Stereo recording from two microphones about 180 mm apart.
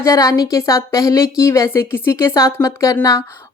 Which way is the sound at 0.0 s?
20° left (ahead or behind).